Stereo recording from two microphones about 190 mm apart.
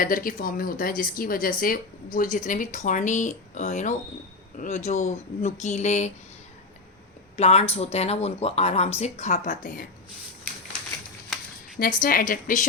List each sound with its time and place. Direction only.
0.0 s speech: 45° left (ahead or behind)
7.3 s speech: 35° left (ahead or behind)
11.8 s speech: 45° left (ahead or behind)